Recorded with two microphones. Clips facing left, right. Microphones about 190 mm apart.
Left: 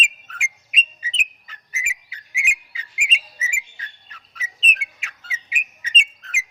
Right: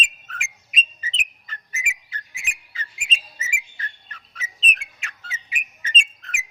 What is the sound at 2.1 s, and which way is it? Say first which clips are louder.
Whistle: left 4 dB; 10° left (ahead or behind).